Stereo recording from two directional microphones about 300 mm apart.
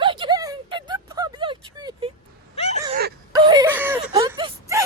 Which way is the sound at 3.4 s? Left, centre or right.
Centre.